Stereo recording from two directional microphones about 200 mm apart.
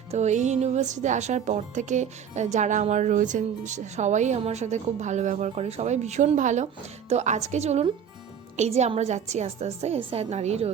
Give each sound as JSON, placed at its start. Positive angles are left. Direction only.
{"t": 0.1, "sound": "speech", "side_deg": -35}